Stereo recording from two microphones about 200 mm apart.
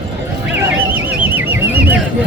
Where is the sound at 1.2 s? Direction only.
10° right (ahead or behind).